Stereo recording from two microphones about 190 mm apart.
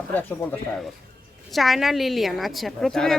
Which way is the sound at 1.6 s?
Centre (ahead or behind).